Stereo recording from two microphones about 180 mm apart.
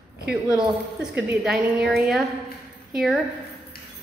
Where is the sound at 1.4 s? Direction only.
5° right (ahead or behind).